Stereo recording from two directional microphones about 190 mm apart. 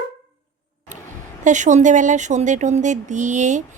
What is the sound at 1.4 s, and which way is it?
Speech, 40° right (ahead or behind).